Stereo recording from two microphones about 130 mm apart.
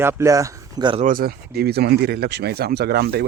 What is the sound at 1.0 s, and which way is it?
Speech, 90° right.